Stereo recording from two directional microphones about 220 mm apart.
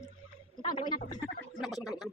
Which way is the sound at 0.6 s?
20° left (ahead or behind).